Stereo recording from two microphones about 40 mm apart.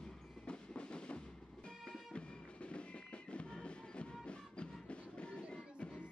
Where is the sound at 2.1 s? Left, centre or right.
Left.